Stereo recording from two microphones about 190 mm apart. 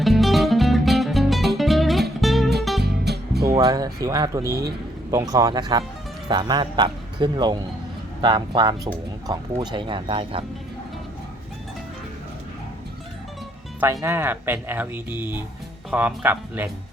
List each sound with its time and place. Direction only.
0.0 s music: centre (ahead or behind)
2.8 s music: 60° right (ahead or behind)
3.6 s speech: 20° right (ahead or behind)
13.7 s speech: 15° right (ahead or behind)